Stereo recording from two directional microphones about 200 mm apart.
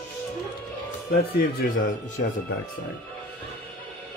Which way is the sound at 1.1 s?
45° left (ahead or behind).